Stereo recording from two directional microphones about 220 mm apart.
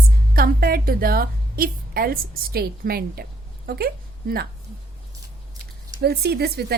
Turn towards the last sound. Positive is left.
turn(degrees=-45)  # may be behind; listen again after turning